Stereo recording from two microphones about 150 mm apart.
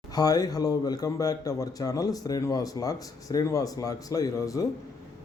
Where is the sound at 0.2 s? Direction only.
25° left (ahead or behind).